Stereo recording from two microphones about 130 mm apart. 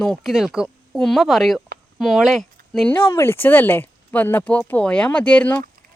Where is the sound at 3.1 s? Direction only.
15° left (ahead or behind).